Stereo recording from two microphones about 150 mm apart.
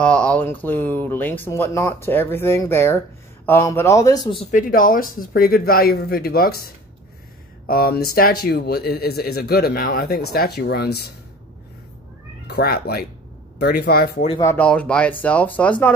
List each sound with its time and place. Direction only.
0.0 s a man's voice: 10° left (ahead or behind); by 4.4 s 25° left (ahead or behind)
4.5 s speech: 65° left (ahead or behind); by 6.7 s 90° left
7.6 s speech: 80° left
12.4 s speech: 90° left
14.4 s speech: 15° left (ahead or behind)